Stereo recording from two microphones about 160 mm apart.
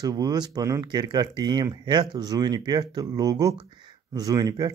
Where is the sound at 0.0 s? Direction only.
25° right (ahead or behind).